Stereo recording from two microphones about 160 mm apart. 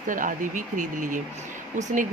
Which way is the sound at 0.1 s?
55° right (ahead or behind).